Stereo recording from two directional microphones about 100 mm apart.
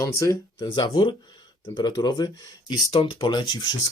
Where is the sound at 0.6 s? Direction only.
50° left (ahead or behind).